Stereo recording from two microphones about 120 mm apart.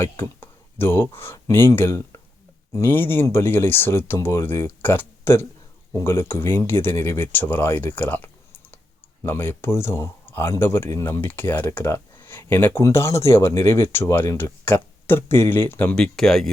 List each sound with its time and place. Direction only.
0.0 s speech: 20° left (ahead or behind); by 16.5 s 5° left (ahead or behind)